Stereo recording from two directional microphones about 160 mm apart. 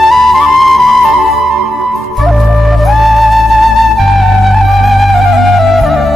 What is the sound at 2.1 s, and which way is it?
Music, centre (ahead or behind).